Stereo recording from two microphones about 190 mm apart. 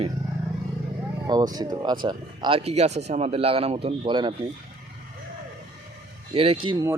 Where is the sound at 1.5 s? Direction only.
20° right (ahead or behind).